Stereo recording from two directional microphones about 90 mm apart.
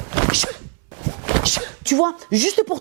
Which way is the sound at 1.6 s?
25° right (ahead or behind).